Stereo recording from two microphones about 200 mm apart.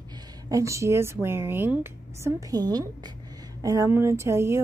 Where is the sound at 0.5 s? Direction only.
15° right (ahead or behind).